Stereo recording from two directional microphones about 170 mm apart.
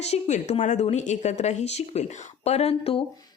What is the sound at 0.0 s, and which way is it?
A woman's voice, 40° left (ahead or behind).